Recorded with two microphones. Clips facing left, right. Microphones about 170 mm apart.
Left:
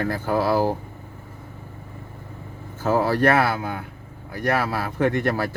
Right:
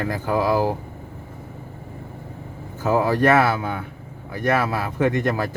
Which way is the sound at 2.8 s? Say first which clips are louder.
Right 1 dB; 15° right (ahead or behind).